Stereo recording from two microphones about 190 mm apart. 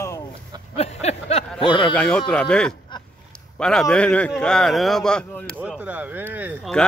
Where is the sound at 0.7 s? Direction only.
35° left (ahead or behind).